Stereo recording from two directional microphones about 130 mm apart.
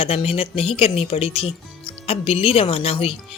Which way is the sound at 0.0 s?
45° left (ahead or behind).